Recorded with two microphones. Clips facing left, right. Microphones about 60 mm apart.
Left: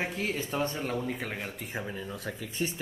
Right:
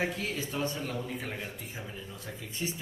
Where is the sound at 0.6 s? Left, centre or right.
Left.